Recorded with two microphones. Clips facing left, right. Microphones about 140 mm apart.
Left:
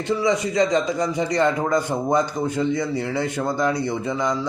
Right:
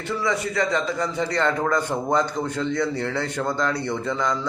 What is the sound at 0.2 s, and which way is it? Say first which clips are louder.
A man's voice: left 3 dB; 15° left (ahead or behind).